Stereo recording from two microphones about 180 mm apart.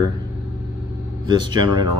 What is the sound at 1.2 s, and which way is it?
Speech, 25° right (ahead or behind).